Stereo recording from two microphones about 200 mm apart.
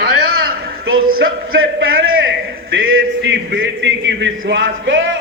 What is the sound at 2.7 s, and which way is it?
A man's voice, 70° right (ahead or behind).